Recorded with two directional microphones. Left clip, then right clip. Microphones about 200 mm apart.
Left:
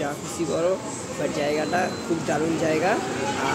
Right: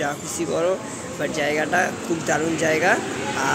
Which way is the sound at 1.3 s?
Centre (ahead or behind).